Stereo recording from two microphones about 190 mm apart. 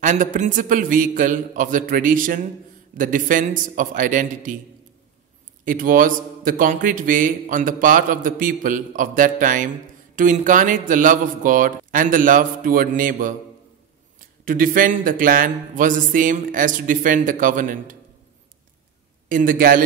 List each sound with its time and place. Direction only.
0.0 s a man's voice: 45° right (ahead or behind)
5.7 s a man's voice: 45° right (ahead or behind)
14.4 s a man's voice: 45° right (ahead or behind)
19.2 s a man's voice: 45° right (ahead or behind)